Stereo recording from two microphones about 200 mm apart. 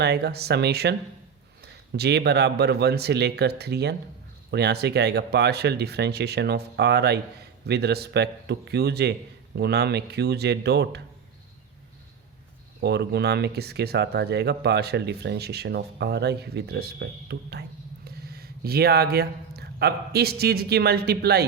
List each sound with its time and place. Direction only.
0.0 s speech: 55° right (ahead or behind)
12.8 s speech: 55° right (ahead or behind)